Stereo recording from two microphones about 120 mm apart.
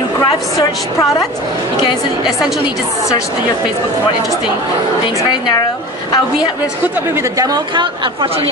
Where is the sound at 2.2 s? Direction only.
5° right (ahead or behind).